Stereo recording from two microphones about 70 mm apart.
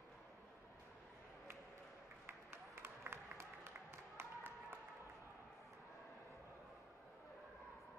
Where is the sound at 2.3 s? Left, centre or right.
Right.